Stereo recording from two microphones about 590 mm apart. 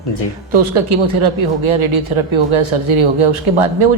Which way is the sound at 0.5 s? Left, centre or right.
Right.